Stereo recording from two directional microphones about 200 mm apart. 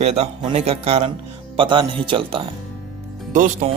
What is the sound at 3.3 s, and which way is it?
Speech, 40° right (ahead or behind).